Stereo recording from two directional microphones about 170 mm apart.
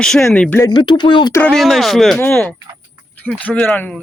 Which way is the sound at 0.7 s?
25° left (ahead or behind).